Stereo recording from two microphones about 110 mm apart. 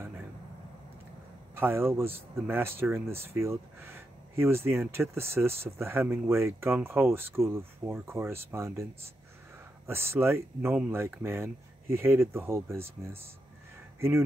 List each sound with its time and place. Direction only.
1.5 s speech: 20° right (ahead or behind)
9.8 s speech: 20° right (ahead or behind)